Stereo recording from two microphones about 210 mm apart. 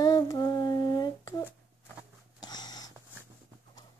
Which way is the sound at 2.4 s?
20° left (ahead or behind).